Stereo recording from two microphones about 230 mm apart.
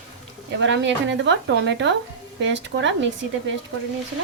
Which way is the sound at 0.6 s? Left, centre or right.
Right.